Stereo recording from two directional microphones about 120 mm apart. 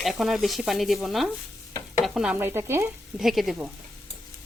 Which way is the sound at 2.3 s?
20° right (ahead or behind).